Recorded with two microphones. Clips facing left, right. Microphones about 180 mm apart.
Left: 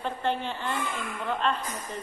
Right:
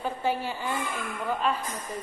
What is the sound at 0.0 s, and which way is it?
Speech, 5° right (ahead or behind).